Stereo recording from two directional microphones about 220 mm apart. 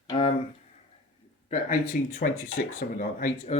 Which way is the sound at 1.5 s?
35° left (ahead or behind).